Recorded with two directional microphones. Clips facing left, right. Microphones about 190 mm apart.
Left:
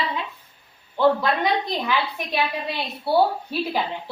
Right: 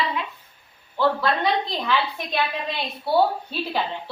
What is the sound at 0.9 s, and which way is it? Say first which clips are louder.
A woman's voice: left 2 dB; 15° left (ahead or behind).